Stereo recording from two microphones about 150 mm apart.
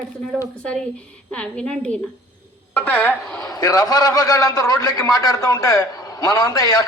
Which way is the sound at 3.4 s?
25° left (ahead or behind).